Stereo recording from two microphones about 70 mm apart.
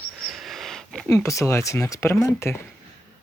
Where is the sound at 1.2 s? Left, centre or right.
Left.